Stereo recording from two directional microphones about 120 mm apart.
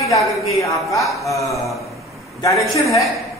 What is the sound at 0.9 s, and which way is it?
A man's voice, 25° left (ahead or behind).